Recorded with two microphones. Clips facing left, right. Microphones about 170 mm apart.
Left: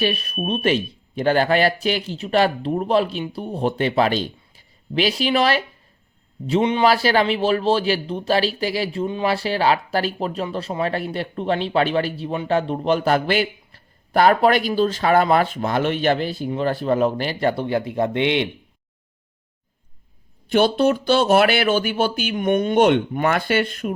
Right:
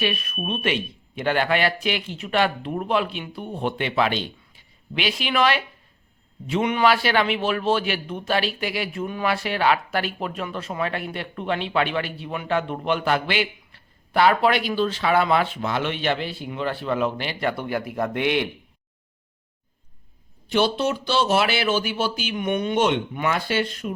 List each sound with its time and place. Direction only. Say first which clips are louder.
0.0 s speech: left 4 dB; 35° left (ahead or behind)
20.5 s speech: left 5 dB; 55° left (ahead or behind)